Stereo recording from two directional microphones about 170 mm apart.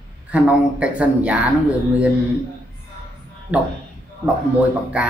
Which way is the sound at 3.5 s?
10° right (ahead or behind).